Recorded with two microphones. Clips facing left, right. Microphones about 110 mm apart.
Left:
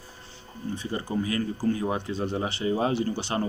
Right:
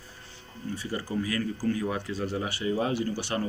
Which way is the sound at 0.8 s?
25° left (ahead or behind).